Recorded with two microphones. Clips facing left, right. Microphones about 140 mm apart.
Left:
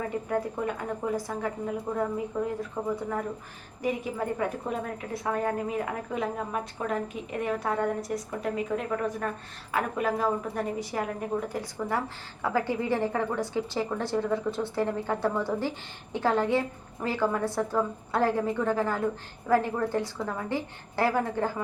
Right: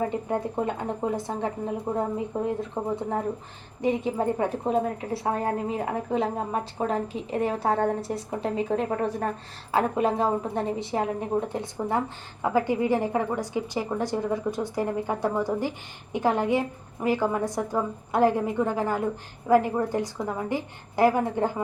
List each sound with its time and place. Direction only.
0.3 s a woman's voice: 25° right (ahead or behind)